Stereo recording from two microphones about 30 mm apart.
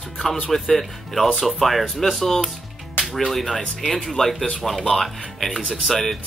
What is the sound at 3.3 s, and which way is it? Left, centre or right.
Speech, centre.